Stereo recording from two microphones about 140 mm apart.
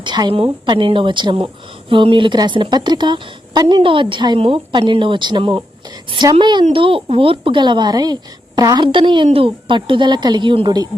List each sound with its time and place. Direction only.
0.0 s speech: 35° right (ahead or behind)